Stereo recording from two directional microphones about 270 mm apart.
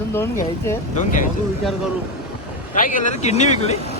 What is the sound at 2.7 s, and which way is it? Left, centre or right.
Speech, left.